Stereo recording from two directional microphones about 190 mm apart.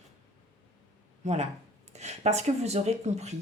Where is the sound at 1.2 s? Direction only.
35° right (ahead or behind).